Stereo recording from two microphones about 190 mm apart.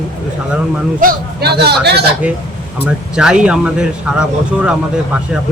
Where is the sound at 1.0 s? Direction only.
60° right (ahead or behind).